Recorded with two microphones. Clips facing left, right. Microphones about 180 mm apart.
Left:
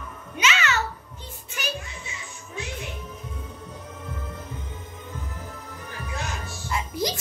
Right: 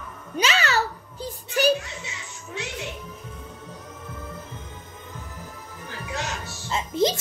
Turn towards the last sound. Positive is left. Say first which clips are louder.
# right 5 dB
turn(degrees=-25)  # may be behind; listen again after turning